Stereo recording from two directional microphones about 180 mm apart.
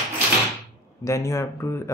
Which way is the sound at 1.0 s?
15° left (ahead or behind).